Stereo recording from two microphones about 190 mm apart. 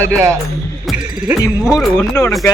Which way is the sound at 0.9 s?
Centre (ahead or behind).